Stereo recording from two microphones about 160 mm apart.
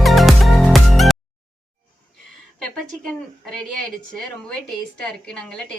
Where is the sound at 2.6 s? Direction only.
5° left (ahead or behind).